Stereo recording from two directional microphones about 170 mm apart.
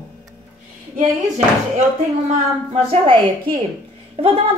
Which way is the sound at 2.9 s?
30° right (ahead or behind).